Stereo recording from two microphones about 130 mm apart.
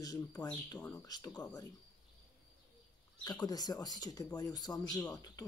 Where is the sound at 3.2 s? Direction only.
30° left (ahead or behind).